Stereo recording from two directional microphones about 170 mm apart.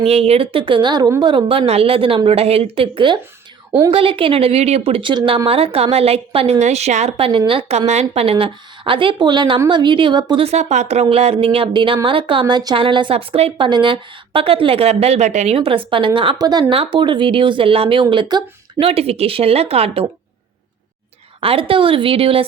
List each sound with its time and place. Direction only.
0.0 s a woman's voice: 35° right (ahead or behind)
10.4 s a woman's voice: 40° right (ahead or behind)
21.4 s a woman's voice: 30° right (ahead or behind)